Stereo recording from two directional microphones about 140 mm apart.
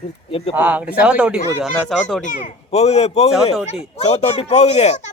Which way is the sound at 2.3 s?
55° left (ahead or behind).